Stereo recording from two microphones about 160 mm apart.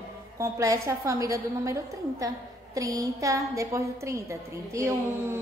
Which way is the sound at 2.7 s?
20° right (ahead or behind).